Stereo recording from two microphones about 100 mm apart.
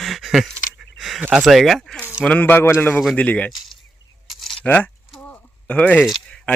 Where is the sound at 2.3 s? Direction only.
15° left (ahead or behind).